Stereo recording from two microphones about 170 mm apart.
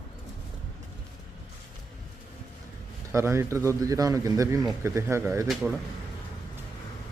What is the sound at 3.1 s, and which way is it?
Speech, 15° right (ahead or behind).